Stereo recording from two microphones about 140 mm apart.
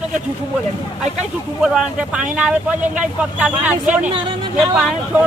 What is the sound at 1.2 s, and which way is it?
Speech, 5° right (ahead or behind).